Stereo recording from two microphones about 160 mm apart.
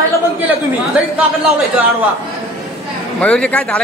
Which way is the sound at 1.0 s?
10° right (ahead or behind).